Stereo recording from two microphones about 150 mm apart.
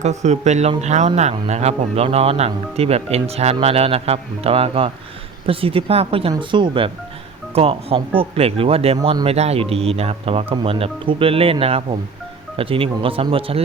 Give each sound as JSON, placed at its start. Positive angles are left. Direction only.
{"t": 0.0, "sound": "speech", "side_deg": -50}